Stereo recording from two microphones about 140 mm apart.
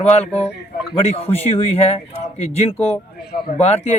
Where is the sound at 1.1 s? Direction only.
45° left (ahead or behind).